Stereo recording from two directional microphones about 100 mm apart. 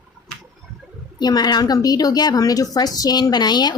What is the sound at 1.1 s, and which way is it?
A woman's voice, 45° left (ahead or behind).